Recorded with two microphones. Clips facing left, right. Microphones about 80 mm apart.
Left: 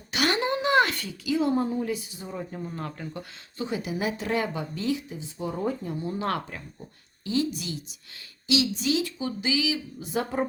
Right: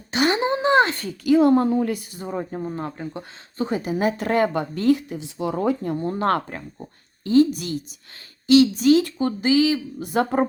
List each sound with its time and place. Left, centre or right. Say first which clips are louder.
0.1 s a sound: right 5 dB; right
1.0 s speech: right 9 dB; right
2.7 s speech: right 5 dB; right
3.6 s speech: right 7 dB; right
5.9 s speech: right 7 dB; right